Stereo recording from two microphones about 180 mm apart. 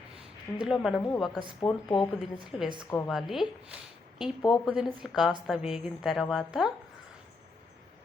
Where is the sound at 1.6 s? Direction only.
25° left (ahead or behind).